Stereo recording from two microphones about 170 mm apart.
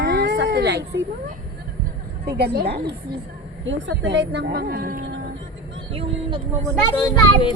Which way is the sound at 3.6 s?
90° right.